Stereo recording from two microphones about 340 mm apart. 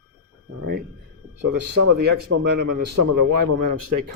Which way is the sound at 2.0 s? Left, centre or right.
Right.